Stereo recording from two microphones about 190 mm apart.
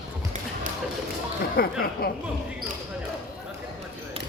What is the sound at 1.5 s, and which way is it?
Speech, 55° left (ahead or behind).